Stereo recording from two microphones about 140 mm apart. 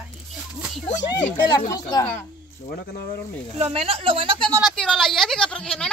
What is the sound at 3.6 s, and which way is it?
Speech, 45° right (ahead or behind).